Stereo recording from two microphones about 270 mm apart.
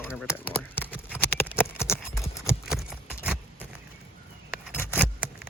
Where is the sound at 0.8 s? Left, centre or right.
Centre.